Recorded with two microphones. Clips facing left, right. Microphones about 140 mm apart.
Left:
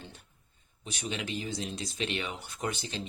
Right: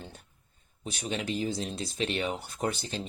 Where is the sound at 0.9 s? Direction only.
40° right (ahead or behind).